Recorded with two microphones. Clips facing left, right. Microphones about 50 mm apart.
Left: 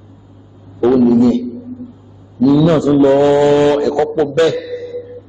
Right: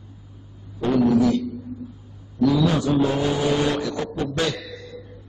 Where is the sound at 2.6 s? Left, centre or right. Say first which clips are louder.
Left 10 dB; left.